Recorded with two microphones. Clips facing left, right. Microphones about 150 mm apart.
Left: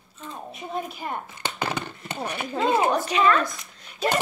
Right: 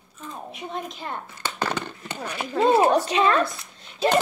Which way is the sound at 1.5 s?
10° left (ahead or behind).